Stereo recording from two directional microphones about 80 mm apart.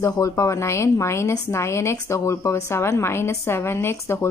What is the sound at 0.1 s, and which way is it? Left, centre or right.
A woman's voice, left.